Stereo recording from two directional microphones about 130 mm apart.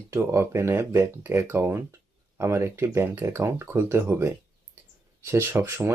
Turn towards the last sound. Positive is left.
turn(degrees=-20)  # may be behind; listen again after turning